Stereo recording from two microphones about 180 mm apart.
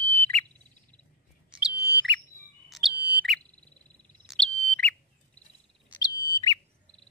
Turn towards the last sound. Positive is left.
turn(degrees=20)  # may be behind; listen again after turning